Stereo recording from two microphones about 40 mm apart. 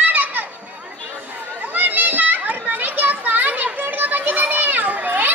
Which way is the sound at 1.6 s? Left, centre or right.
Right.